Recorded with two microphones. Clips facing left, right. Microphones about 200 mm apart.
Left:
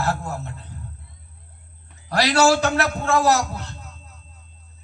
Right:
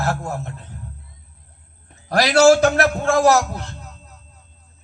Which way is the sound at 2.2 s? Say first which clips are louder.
Right 5 dB; 45° right (ahead or behind).